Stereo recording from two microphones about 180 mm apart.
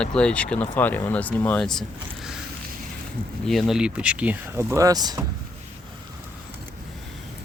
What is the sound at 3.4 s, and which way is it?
Speech, centre (ahead or behind).